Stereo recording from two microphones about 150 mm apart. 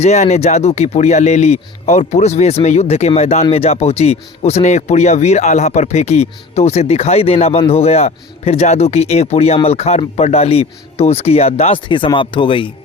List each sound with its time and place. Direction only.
0.0 s speech: 45° left (ahead or behind)